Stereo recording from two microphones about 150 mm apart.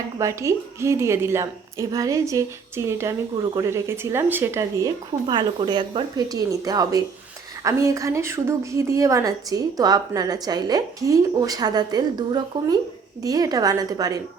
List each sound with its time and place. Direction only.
0.2 s a woman's voice: 20° right (ahead or behind)
5.3 s a woman's voice: 30° right (ahead or behind)